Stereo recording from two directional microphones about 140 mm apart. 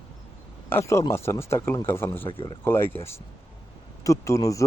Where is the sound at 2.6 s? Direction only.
15° left (ahead or behind).